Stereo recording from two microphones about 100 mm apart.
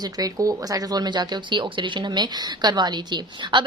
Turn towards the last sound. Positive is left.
turn(degrees=-50)  # may be behind; listen again after turning